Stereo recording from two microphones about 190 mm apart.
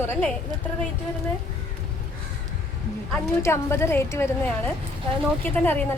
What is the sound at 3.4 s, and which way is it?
A woman's voice, 15° left (ahead or behind).